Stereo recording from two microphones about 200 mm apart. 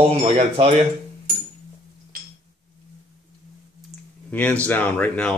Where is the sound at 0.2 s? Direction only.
30° right (ahead or behind).